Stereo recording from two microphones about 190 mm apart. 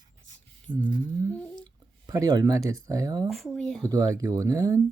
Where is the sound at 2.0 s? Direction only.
20° right (ahead or behind).